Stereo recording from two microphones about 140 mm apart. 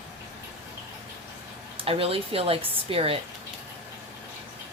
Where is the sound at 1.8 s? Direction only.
40° right (ahead or behind).